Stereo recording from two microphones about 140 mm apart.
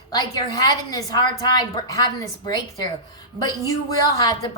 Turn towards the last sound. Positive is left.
turn(degrees=25)  # may be behind; listen again after turning